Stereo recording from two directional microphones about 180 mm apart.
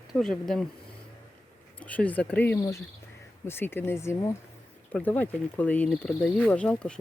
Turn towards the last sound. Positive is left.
turn(degrees=5)  # may be behind; listen again after turning